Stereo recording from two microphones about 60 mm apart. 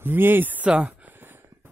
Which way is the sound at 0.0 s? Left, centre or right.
Right.